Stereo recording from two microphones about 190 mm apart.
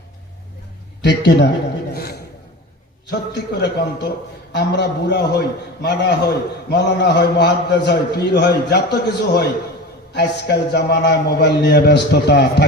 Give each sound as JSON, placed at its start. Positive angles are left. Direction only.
{"t": 1.0, "sound": "a man's voice", "side_deg": 65}
{"t": 1.9, "sound": "a sound", "side_deg": 55}
{"t": 3.1, "sound": "a man's voice", "side_deg": 60}